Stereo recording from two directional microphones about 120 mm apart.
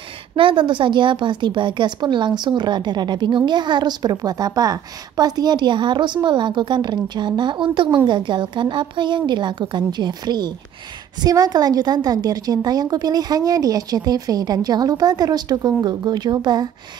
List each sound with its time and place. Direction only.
0.4 s a woman's voice: 45° right (ahead or behind)